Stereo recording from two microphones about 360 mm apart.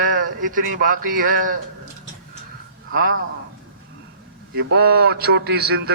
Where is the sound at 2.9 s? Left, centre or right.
Right.